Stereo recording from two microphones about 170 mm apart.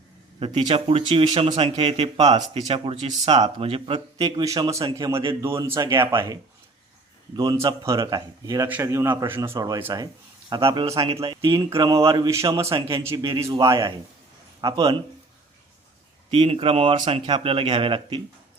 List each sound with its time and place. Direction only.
0.3 s a man's voice: 35° right (ahead or behind)
10.5 s speech: 30° right (ahead or behind)
11.7 s a man's voice: 25° right (ahead or behind)
16.3 s speech: 35° right (ahead or behind)